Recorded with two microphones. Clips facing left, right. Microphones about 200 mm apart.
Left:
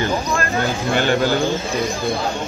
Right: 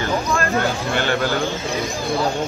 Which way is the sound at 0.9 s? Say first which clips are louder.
Left 5 dB; 15° left (ahead or behind).